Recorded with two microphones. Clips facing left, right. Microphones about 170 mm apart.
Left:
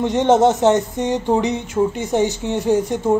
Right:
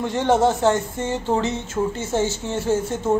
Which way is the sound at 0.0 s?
20° left (ahead or behind).